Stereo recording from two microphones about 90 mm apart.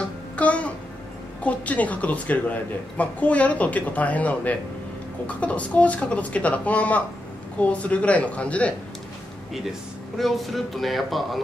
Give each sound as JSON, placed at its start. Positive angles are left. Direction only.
{"t": 0.0, "sound": "babbling", "side_deg": 15}
{"t": 1.4, "sound": "a woman's voice", "side_deg": 15}
{"t": 9.5, "sound": "speech", "side_deg": 0}